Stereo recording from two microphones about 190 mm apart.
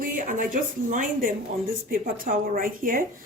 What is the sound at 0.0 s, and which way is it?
A woman's voice, 45° right (ahead or behind).